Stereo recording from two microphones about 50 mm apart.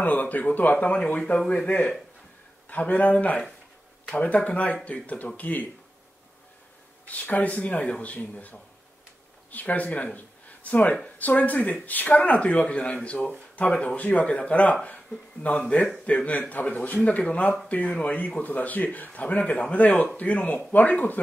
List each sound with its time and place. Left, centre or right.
0.0 s speech: left
2.7 s speech: left
7.1 s speech: left
10.1 s a sound: left
11.1 s speech: left